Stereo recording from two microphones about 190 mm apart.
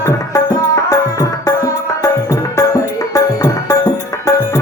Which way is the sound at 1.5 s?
15° left (ahead or behind).